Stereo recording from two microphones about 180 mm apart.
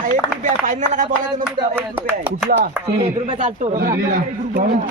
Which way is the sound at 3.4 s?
35° right (ahead or behind).